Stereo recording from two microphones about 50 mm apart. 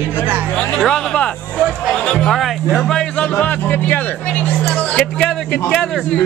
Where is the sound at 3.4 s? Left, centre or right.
Left.